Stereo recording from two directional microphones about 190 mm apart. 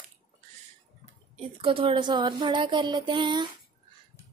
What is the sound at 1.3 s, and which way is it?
Speech, 25° right (ahead or behind).